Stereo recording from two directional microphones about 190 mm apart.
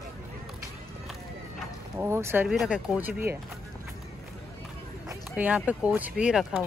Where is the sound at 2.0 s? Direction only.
15° right (ahead or behind).